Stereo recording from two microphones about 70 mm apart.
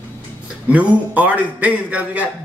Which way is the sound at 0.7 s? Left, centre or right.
Right.